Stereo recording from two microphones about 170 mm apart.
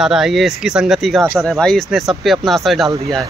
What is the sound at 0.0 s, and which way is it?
Speech, 5° right (ahead or behind).